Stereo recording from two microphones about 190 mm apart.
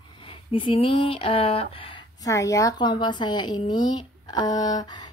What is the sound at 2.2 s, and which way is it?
Speech, 15° left (ahead or behind).